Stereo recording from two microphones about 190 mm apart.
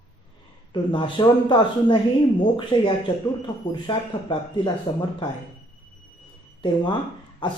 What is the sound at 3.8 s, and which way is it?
Speech, 25° left (ahead or behind).